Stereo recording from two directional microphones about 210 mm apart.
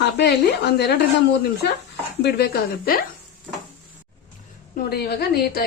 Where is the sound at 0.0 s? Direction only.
50° left (ahead or behind).